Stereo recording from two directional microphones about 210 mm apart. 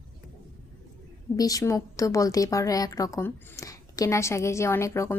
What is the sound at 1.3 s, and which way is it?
Speech, 15° left (ahead or behind).